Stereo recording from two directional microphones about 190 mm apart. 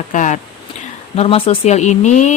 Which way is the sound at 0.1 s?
40° left (ahead or behind).